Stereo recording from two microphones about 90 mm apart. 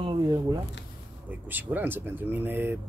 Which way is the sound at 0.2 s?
45° right (ahead or behind).